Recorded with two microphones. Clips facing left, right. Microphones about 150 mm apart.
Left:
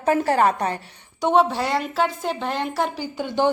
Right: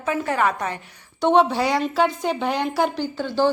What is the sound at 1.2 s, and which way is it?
A woman's voice, 5° left (ahead or behind).